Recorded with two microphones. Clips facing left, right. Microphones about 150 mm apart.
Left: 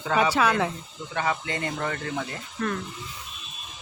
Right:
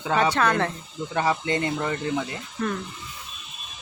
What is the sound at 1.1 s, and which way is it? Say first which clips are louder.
Speech: right 4 dB; 30° right (ahead or behind).